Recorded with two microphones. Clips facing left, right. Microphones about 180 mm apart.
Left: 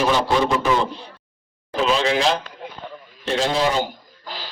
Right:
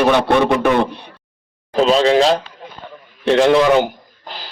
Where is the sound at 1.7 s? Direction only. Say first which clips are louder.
Right 7 dB; 40° right (ahead or behind).